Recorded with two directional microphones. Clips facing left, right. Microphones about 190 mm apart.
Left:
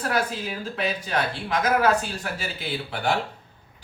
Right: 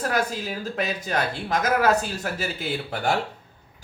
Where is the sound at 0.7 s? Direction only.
45° right (ahead or behind).